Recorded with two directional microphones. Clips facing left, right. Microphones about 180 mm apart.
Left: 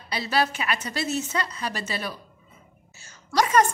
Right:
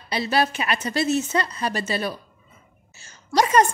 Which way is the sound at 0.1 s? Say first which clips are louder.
Right 3 dB; 25° right (ahead or behind).